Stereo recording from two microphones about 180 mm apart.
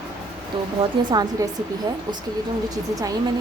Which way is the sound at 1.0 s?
20° right (ahead or behind).